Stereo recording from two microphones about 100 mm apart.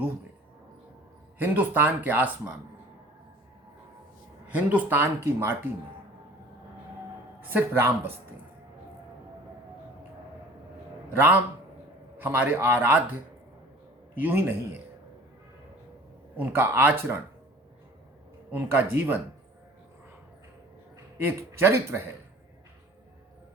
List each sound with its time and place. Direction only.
1.4 s speech: 20° right (ahead or behind)
4.4 s speech: 15° right (ahead or behind)
7.5 s speech: 25° right (ahead or behind)
11.1 s a man's voice: 20° right (ahead or behind)
14.2 s speech: 20° right (ahead or behind)
16.4 s speech: 20° right (ahead or behind)
18.5 s speech: 20° right (ahead or behind)
21.2 s speech: 20° right (ahead or behind)